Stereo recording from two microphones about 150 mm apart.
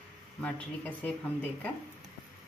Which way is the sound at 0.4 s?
10° left (ahead or behind).